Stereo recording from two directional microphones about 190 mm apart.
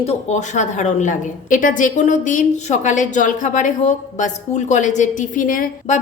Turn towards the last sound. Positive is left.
turn(degrees=45)  # may be behind; listen again after turning